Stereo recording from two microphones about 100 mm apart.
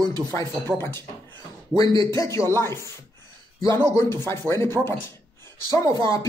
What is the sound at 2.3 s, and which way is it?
Speech, 25° left (ahead or behind).